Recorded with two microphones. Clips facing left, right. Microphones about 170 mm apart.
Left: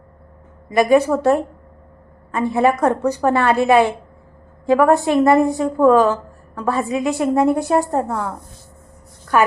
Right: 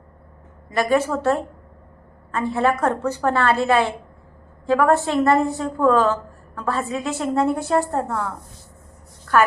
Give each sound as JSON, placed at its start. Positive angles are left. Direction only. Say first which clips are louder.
{"t": 0.7, "sound": "a woman's voice", "louder": "left 6 dB", "side_deg": 15}